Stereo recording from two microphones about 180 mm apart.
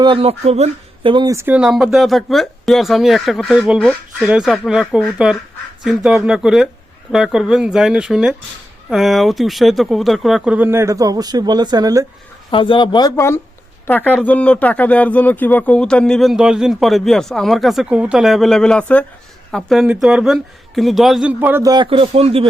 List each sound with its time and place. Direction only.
0.0 s speech: 30° right (ahead or behind)
12.5 s a woman's voice: 30° left (ahead or behind); by 22.4 s 35° right (ahead or behind)